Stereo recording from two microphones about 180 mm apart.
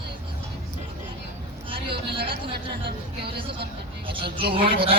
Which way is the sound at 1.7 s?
30° right (ahead or behind).